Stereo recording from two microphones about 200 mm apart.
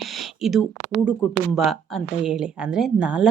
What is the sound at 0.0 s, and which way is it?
Speech, centre (ahead or behind).